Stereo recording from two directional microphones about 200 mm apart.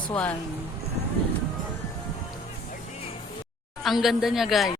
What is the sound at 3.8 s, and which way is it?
Speech, centre (ahead or behind).